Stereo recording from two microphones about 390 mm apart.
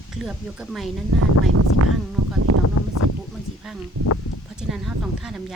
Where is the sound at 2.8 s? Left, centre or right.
Left.